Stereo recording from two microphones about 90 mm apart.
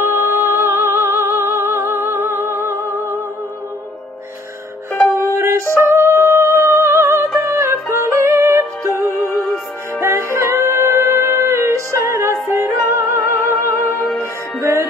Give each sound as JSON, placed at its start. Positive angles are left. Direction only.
{"t": 0.0, "sound": "music", "side_deg": -30}
{"t": 5.3, "sound": "music", "side_deg": -30}